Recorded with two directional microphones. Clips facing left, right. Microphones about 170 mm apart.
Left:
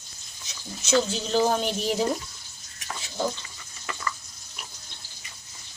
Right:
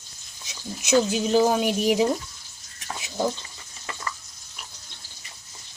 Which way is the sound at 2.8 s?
15° right (ahead or behind).